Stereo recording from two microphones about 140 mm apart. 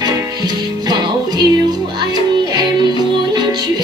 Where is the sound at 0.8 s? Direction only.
30° right (ahead or behind).